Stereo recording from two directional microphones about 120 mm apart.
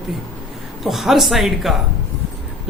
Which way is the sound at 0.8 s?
Centre (ahead or behind).